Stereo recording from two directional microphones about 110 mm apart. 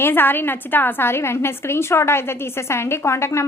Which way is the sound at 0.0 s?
20° left (ahead or behind).